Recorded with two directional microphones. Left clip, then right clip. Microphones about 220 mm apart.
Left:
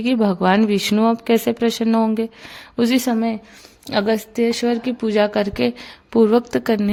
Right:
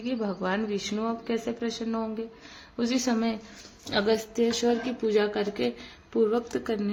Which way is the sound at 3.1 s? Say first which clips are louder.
Left 7 dB; 35° left (ahead or behind).